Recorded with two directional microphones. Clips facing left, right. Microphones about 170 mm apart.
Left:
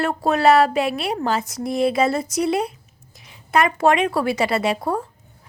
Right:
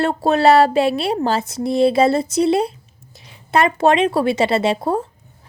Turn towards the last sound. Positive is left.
turn(degrees=-25)  # may be behind; listen again after turning